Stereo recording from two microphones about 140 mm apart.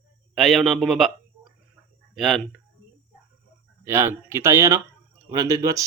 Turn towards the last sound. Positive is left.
turn(degrees=-25)  # may be behind; listen again after turning